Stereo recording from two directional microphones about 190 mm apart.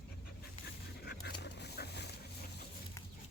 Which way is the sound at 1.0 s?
60° left (ahead or behind).